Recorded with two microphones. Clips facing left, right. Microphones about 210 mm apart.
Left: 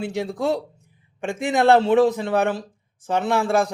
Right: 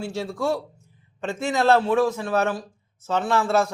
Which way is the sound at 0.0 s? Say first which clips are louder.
Left 2 dB; 20° left (ahead or behind).